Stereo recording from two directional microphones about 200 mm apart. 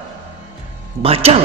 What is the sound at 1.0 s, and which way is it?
Speech, 30° right (ahead or behind).